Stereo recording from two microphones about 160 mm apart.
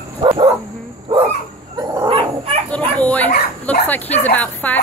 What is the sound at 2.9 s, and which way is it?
Speech, 10° left (ahead or behind).